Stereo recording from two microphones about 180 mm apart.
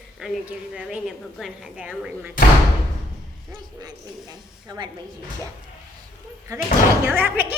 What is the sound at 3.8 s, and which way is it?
A woman's voice, 20° right (ahead or behind).